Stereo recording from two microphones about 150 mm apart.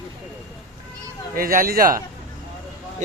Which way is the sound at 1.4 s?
75° right (ahead or behind).